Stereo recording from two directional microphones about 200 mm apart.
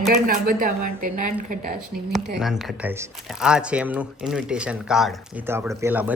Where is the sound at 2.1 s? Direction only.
Centre (ahead or behind).